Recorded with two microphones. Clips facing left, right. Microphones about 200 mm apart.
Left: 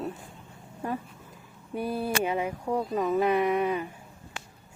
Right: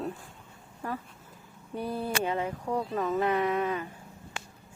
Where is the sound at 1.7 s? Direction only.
10° left (ahead or behind).